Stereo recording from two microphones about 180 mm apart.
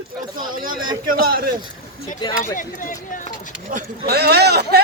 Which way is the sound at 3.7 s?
45° right (ahead or behind).